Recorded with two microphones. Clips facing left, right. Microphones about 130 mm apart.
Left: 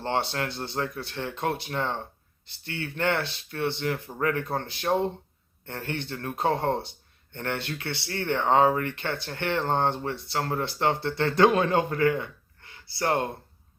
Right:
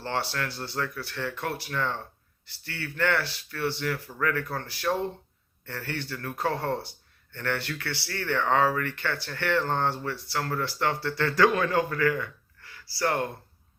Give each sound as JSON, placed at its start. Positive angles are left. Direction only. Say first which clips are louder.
{"t": 0.0, "sound": "speech", "louder": "left 3 dB", "side_deg": 20}